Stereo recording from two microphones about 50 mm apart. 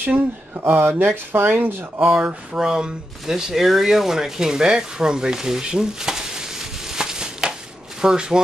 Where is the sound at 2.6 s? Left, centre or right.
Centre.